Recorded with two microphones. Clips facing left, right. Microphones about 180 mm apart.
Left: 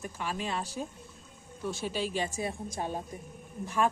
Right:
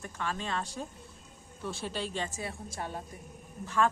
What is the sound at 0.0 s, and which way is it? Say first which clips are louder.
A woman's voice: left 1 dB; 10° left (ahead or behind).